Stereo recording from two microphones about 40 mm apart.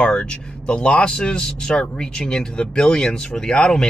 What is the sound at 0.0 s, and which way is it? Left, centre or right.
Speech, left.